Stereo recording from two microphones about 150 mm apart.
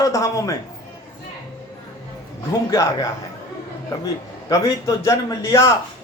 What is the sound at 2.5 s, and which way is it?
A man's voice, 20° left (ahead or behind).